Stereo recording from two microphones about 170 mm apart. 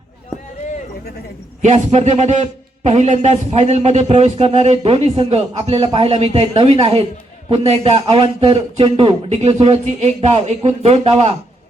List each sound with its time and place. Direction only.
1.6 s a man's voice: 40° right (ahead or behind)